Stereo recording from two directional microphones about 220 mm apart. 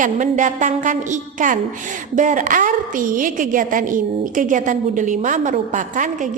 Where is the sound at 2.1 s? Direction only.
35° right (ahead or behind).